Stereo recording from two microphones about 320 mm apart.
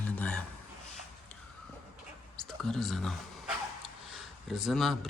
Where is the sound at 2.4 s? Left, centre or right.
Centre.